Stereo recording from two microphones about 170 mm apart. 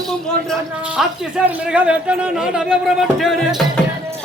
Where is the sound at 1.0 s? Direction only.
Centre (ahead or behind).